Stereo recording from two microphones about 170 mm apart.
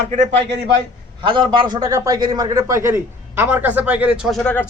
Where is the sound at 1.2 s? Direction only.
30° right (ahead or behind).